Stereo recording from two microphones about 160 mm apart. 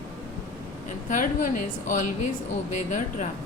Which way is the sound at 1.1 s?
55° left (ahead or behind).